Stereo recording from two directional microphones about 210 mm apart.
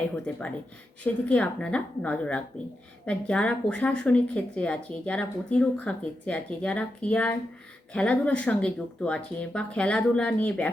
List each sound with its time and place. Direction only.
0.3 s speech: 5° left (ahead or behind)